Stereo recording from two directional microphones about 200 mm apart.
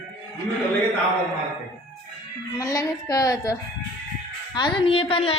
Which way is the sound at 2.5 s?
15° left (ahead or behind).